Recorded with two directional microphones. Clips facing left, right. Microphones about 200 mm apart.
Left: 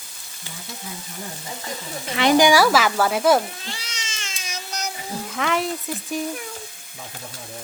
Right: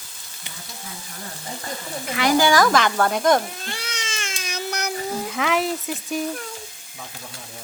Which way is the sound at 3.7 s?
55° right (ahead or behind).